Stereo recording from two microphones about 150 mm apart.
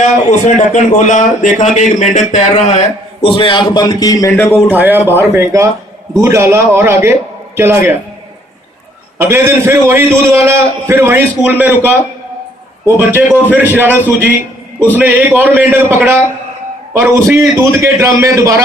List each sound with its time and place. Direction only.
0.0 s speech: 50° left (ahead or behind); by 4.5 s 15° left (ahead or behind)
4.5 s a man's voice: 15° right (ahead or behind)
9.2 s a man's voice: 15° right (ahead or behind)
13.0 s a man's voice: 10° right (ahead or behind)